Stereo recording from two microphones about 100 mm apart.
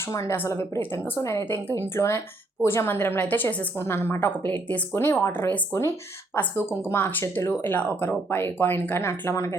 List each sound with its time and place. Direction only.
0.0 s speech: 30° left (ahead or behind)